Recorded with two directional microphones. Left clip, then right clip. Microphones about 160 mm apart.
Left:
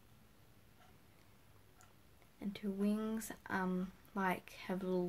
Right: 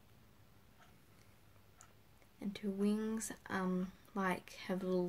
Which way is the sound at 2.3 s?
20° left (ahead or behind).